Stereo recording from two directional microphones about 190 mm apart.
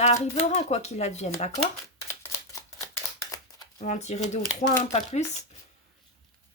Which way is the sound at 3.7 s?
40° left (ahead or behind).